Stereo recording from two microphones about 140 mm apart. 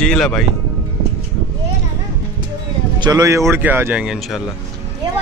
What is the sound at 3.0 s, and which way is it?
Speech, 25° right (ahead or behind).